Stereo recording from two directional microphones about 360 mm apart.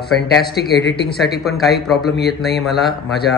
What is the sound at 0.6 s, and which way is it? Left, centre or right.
Speech, left.